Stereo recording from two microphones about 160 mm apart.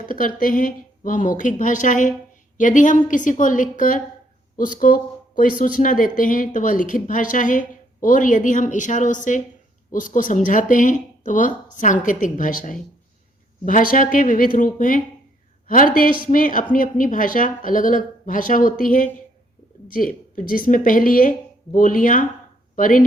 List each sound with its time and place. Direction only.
0.0 s a woman's voice: 60° left (ahead or behind)